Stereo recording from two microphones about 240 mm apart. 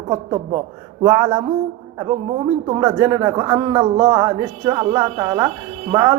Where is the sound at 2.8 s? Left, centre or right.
Centre.